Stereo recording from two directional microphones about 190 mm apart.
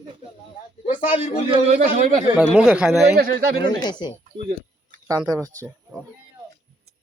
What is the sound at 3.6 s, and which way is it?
Speech, 20° left (ahead or behind).